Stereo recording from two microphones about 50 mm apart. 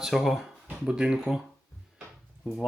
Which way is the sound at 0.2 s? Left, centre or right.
Centre.